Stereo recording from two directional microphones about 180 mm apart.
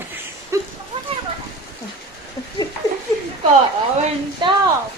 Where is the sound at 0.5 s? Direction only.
15° right (ahead or behind).